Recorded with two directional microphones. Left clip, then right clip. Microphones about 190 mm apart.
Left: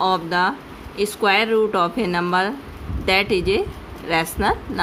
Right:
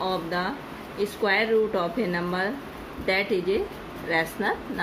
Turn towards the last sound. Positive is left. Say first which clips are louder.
# left 5 dB
turn(degrees=55)  # may be behind; listen again after turning